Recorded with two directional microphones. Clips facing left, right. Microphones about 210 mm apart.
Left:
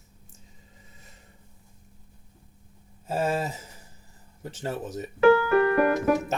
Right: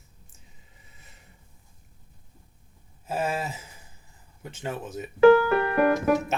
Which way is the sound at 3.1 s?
35° left (ahead or behind).